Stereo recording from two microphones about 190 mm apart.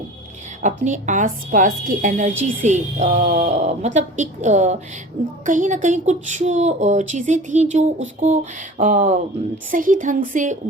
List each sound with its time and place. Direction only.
0.6 s speech: 40° right (ahead or behind)